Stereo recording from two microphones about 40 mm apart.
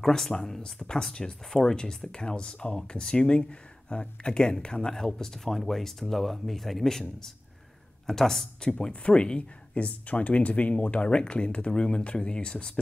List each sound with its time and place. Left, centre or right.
0.0 s speech: centre
0.7 s speech: left